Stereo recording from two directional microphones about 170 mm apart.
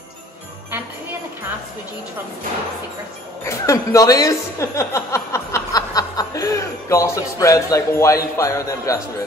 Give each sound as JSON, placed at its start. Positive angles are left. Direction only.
{"t": 3.4, "sound": "a woman's voice", "side_deg": 20}